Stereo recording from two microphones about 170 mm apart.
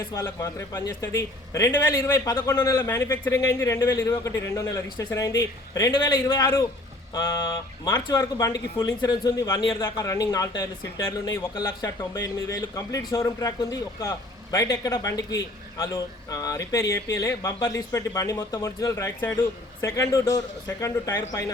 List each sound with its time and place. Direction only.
0.0 s speech: 20° left (ahead or behind)